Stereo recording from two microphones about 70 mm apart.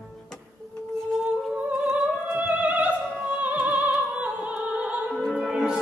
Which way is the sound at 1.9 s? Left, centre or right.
Centre.